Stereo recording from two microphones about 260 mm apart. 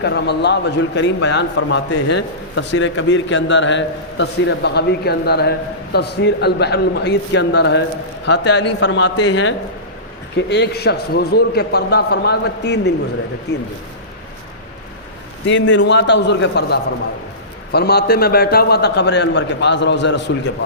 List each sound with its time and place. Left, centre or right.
0.0 s a man's voice: left
15.4 s a man's voice: left